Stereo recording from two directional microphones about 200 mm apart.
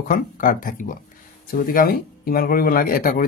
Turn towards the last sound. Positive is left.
turn(degrees=45)  # may be behind; listen again after turning